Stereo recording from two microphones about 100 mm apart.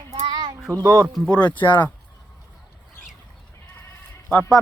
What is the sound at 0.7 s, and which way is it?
Speech, 35° right (ahead or behind).